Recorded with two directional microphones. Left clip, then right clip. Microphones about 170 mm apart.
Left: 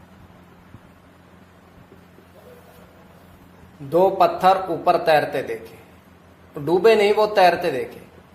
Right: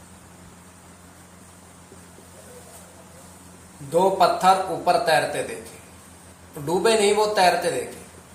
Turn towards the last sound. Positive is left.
turn(degrees=60)  # may be behind; listen again after turning